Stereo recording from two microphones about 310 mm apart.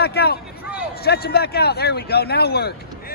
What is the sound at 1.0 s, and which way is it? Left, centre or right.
Speech, left.